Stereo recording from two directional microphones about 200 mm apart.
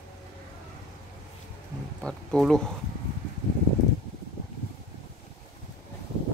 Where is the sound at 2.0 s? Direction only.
5° left (ahead or behind).